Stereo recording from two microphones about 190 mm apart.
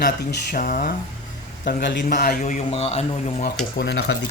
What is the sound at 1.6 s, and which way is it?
Speech, 65° left (ahead or behind).